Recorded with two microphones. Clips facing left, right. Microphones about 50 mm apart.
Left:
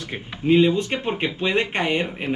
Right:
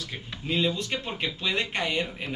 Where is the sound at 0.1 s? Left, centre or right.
Left.